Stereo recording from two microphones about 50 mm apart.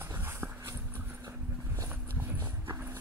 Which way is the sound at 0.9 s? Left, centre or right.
Right.